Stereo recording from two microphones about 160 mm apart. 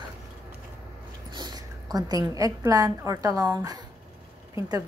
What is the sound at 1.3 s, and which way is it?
A woman's voice, 25° right (ahead or behind).